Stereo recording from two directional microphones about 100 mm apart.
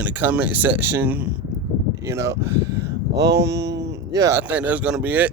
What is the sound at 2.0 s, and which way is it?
Speech, 30° right (ahead or behind).